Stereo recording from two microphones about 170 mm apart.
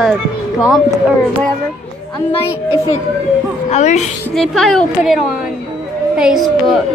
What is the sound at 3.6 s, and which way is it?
Speech, 40° left (ahead or behind).